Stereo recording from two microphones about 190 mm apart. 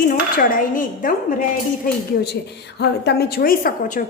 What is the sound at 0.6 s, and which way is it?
Speech, 45° left (ahead or behind).